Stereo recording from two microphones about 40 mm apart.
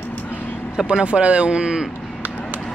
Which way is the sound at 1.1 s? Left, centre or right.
Right.